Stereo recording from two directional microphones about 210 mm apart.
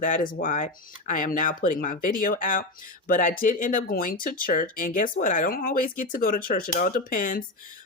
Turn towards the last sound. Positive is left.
turn(degrees=40)  # may be behind; listen again after turning